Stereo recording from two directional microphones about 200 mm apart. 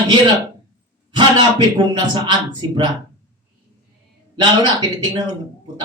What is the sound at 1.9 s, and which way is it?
Speech, 20° right (ahead or behind).